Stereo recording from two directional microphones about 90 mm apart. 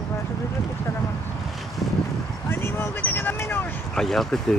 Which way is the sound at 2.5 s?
25° left (ahead or behind).